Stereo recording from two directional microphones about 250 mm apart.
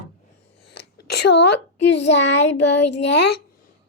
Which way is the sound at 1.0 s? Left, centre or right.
Left.